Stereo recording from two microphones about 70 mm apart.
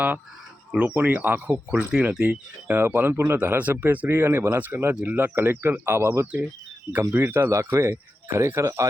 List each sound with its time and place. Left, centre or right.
0.8 s speech: right
2.7 s speech: right
3.3 s speech: right